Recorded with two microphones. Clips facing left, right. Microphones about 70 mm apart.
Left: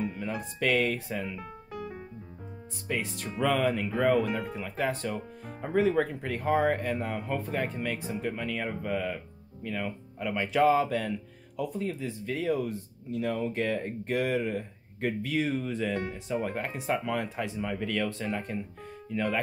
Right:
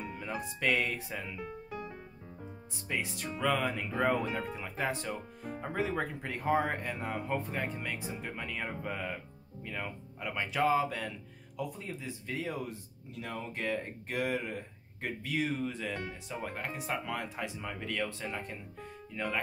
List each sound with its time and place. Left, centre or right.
0.0 s speech: centre
2.9 s speech: centre
3.9 s speech: centre